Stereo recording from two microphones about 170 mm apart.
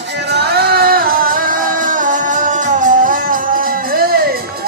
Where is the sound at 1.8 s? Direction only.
50° right (ahead or behind).